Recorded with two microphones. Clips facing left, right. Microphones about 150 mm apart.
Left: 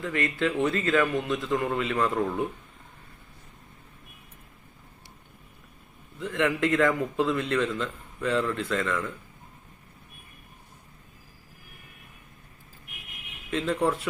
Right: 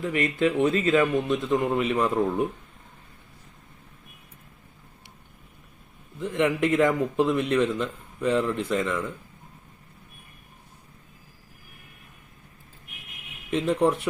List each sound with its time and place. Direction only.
0.0 s a man's voice: 20° right (ahead or behind)
6.1 s a man's voice: 20° right (ahead or behind)
13.5 s a man's voice: 20° right (ahead or behind)